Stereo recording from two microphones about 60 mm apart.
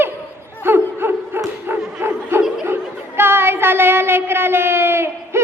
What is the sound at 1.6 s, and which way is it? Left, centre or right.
Dog, right.